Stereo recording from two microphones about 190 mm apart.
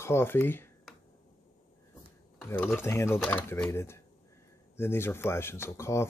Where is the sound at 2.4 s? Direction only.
10° left (ahead or behind).